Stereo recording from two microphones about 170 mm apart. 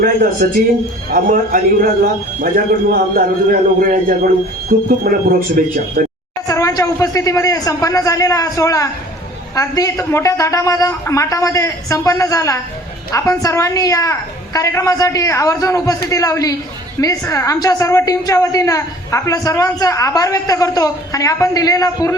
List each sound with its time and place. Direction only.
0.0 s a man's voice: 60° right (ahead or behind)
2.9 s a man's voice: 60° right (ahead or behind)
6.5 s a woman's voice: 20° left (ahead or behind)